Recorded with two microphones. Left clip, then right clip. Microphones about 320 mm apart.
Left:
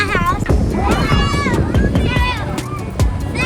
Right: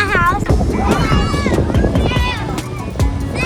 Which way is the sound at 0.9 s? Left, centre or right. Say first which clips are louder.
Left 1 dB; centre.